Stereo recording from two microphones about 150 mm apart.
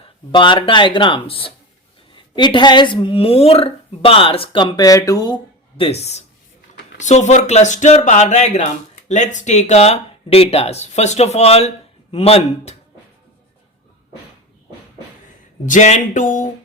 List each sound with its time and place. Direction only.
0.3 s a woman's voice: 35° left (ahead or behind)
15.6 s music: 55° left (ahead or behind)